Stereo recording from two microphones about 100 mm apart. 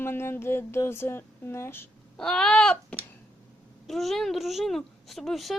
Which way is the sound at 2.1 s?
5° left (ahead or behind).